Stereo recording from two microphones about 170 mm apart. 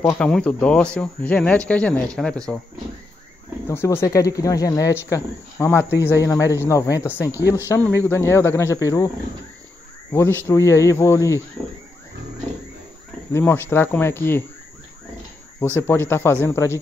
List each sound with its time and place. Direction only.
0.0 s speech: 5° left (ahead or behind)
3.6 s speech: 15° left (ahead or behind)
7.2 s speech: 15° right (ahead or behind)
7.6 s speech: 15° left (ahead or behind)
10.4 s speech: 15° left (ahead or behind)
13.3 s speech: 15° left (ahead or behind)
15.9 s speech: 15° left (ahead or behind)